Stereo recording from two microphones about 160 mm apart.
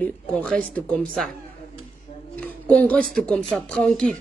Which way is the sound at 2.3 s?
10° left (ahead or behind).